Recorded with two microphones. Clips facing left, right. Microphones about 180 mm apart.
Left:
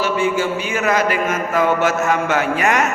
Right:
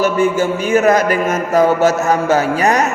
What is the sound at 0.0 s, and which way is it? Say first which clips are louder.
A man's voice: right 4 dB; 45° right (ahead or behind).